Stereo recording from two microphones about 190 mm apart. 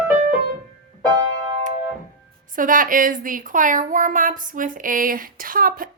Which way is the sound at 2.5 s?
45° right (ahead or behind).